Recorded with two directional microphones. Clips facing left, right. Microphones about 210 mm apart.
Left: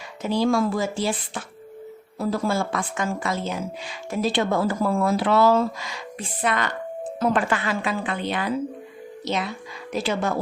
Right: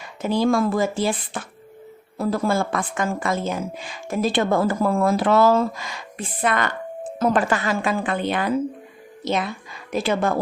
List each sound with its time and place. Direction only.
0.2 s a woman's voice: 50° right (ahead or behind)
7.2 s a woman's voice: 40° right (ahead or behind)